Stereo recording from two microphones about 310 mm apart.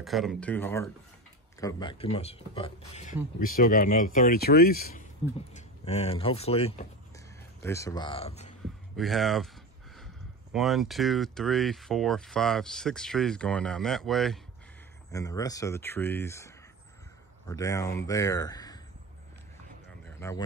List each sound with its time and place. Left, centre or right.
0.0 s speech: centre
8.9 s speech: centre
15.0 s speech: centre
20.1 s a sound: centre